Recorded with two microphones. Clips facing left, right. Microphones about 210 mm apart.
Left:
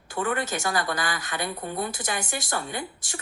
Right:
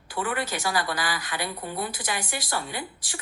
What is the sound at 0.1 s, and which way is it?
Speech, 45° left (ahead or behind).